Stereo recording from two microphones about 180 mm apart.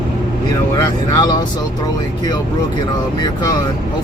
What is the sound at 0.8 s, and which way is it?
Speech, 20° left (ahead or behind).